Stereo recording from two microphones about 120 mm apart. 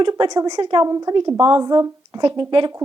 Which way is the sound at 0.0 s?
35° right (ahead or behind).